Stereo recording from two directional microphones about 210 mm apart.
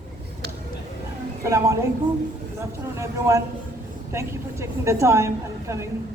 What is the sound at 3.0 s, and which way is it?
Speech, 15° right (ahead or behind).